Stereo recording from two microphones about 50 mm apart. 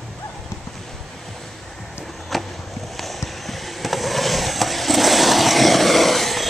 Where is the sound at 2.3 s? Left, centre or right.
Centre.